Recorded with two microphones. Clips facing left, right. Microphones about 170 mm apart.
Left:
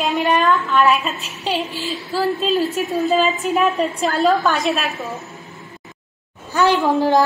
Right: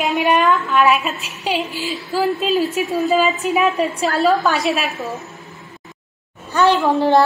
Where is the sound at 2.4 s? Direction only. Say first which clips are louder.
Right 1 dB; centre (ahead or behind).